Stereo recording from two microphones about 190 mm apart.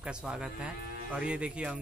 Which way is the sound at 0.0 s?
5° right (ahead or behind).